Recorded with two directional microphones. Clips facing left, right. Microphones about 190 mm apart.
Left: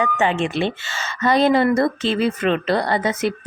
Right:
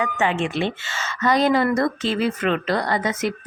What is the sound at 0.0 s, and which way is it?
Speech, 30° left (ahead or behind).